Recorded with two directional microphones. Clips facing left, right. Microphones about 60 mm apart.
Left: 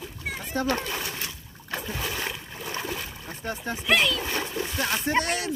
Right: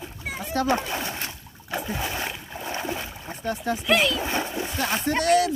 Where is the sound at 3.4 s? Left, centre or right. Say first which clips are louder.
Right 5 dB; left.